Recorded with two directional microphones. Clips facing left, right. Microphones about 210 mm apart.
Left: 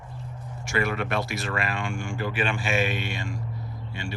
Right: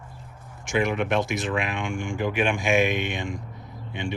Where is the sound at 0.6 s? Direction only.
15° right (ahead or behind).